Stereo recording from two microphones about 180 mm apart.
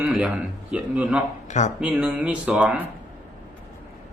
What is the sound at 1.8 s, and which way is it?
Speech, 10° right (ahead or behind).